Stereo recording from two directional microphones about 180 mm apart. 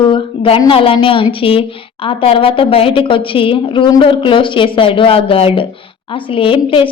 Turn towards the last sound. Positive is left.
turn(degrees=30)  # may be behind; listen again after turning